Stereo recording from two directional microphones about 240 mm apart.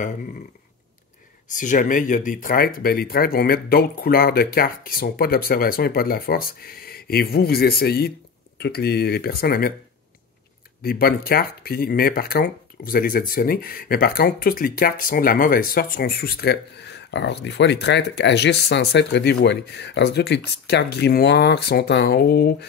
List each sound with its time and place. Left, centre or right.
1.5 s speech: left
10.8 s speech: left